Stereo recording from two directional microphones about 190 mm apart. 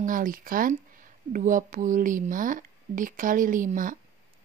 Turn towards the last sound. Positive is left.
turn(degrees=-45)  # may be behind; listen again after turning